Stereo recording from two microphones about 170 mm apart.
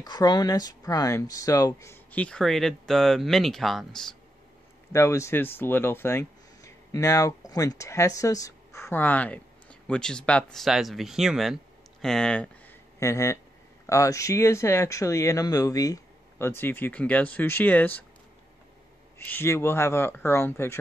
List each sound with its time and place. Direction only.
0.0 s speech: 25° left (ahead or behind); by 4.1 s centre (ahead or behind)
4.9 s speech: 15° left (ahead or behind)
13.0 s speech: 15° left (ahead or behind)
19.1 s speech: 15° left (ahead or behind)